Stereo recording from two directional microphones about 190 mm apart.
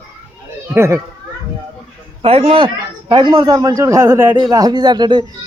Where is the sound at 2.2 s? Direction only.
30° right (ahead or behind).